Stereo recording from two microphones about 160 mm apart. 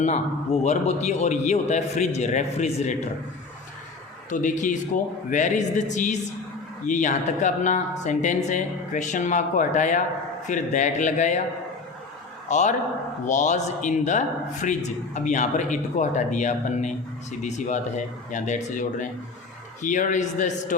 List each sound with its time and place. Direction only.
0.6 s speech: 45° left (ahead or behind)
4.3 s speech: 55° left (ahead or behind)
12.5 s a man's voice: 50° left (ahead or behind)